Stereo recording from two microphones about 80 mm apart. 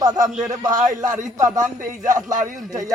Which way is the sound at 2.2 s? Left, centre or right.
Centre.